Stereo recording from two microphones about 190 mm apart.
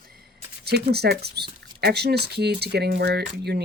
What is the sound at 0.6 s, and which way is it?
Speech, 60° right (ahead or behind).